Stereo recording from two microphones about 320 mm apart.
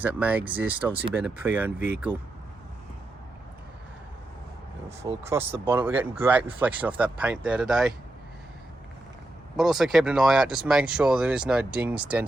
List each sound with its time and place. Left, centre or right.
0.0 s speech: centre
4.9 s speech: centre
5.4 s speech: centre
9.6 s speech: centre